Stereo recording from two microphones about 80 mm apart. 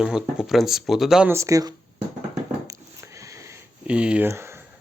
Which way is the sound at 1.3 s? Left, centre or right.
Right.